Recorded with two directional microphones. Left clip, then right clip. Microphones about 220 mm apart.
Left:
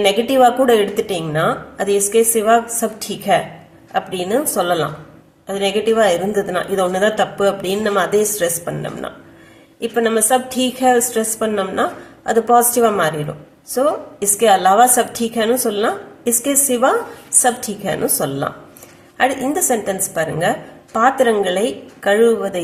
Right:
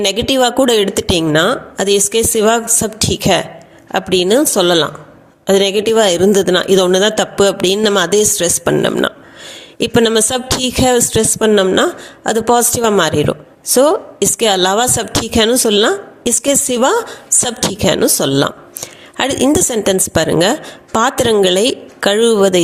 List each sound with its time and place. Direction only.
0.0 s a woman's voice: 40° right (ahead or behind)